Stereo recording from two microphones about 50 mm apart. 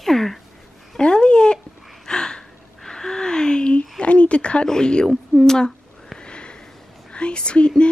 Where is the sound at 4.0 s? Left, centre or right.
Left.